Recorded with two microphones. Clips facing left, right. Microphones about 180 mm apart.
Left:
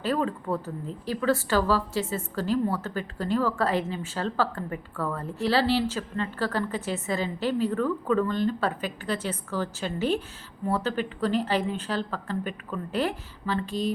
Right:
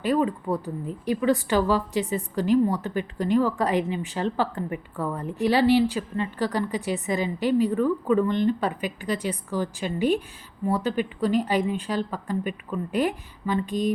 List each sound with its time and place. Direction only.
0.0 s a woman's voice: 15° right (ahead or behind)